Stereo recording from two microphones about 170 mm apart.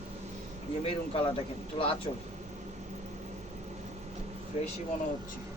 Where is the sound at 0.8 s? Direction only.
30° left (ahead or behind).